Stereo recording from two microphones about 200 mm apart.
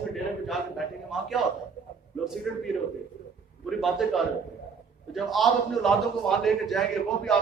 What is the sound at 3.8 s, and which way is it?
A man's voice, centre (ahead or behind).